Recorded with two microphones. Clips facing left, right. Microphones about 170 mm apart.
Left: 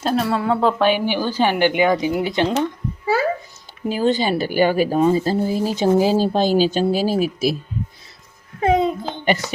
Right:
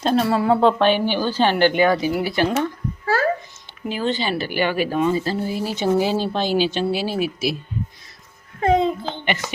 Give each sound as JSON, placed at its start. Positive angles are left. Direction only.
{"t": 0.0, "sound": "speech", "side_deg": 0}
{"t": 3.8, "sound": "speech", "side_deg": 40}
{"t": 8.6, "sound": "a child's voice", "side_deg": 10}
{"t": 9.2, "sound": "speech", "side_deg": 40}